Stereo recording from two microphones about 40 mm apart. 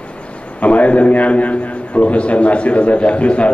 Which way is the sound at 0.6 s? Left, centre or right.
Left.